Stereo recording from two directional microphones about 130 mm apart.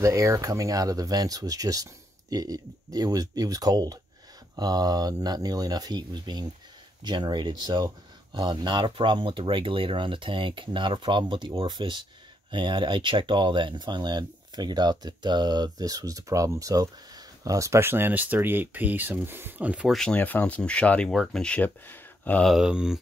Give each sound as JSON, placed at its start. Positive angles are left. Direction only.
{"t": 0.0, "sound": "speech", "side_deg": -25}
{"t": 19.9, "sound": "speech", "side_deg": 5}
{"t": 22.4, "sound": "speech", "side_deg": 0}